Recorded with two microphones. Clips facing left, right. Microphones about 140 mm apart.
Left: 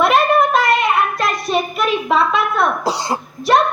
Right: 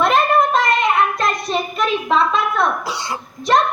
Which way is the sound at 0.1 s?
10° left (ahead or behind).